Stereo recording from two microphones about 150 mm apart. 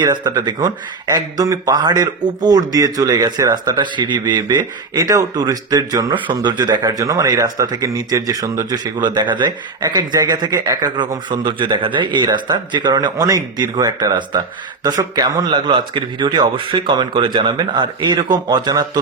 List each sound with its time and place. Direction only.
0.0 s speech: 25° right (ahead or behind)